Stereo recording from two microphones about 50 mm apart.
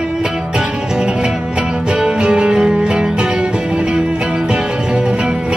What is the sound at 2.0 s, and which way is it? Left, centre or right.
Music, centre.